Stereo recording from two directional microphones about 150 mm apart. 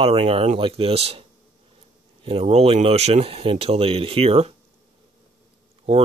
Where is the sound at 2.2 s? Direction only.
45° right (ahead or behind).